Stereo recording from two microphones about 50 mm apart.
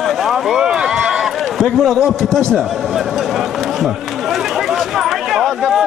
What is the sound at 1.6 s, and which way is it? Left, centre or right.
Speech, centre.